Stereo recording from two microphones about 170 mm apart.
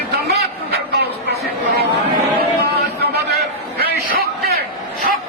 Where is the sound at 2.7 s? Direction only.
70° right (ahead or behind).